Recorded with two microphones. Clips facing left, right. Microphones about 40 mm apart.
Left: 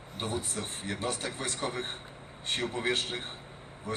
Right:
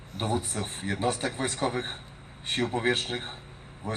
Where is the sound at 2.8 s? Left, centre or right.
Right.